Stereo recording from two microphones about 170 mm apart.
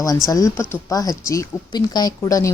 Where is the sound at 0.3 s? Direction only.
20° left (ahead or behind).